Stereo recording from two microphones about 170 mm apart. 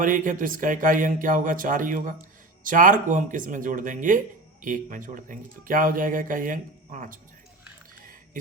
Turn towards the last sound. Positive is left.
turn(degrees=-50)  # may be behind; listen again after turning